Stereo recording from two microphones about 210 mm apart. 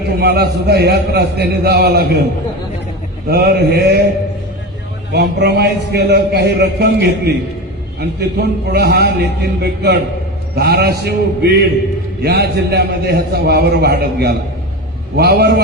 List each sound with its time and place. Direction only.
0.2 s a man's voice: 50° right (ahead or behind)
3.2 s a man's voice: 50° right (ahead or behind)
5.1 s a man's voice: 50° right (ahead or behind)